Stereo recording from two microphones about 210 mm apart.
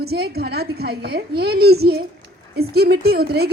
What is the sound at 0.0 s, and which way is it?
Speech, 50° right (ahead or behind).